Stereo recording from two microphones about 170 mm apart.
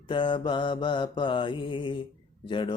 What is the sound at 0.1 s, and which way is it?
Mantra, 30° left (ahead or behind).